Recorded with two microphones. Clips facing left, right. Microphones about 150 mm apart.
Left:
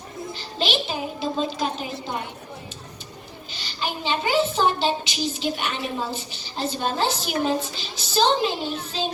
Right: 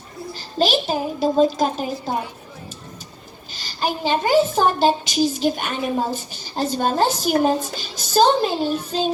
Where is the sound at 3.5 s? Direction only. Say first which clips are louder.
Right 6 dB; 40° right (ahead or behind).